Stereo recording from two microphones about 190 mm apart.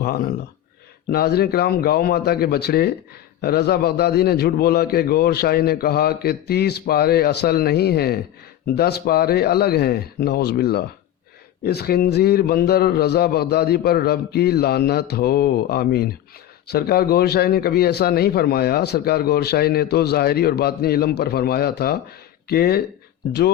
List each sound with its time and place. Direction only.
1.1 s a man's voice: 55° left (ahead or behind)